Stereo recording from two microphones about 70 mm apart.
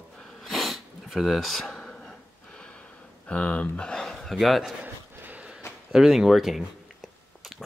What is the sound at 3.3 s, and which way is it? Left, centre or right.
Speech, centre.